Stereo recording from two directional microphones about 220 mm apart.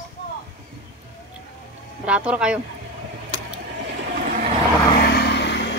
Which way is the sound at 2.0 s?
5° right (ahead or behind).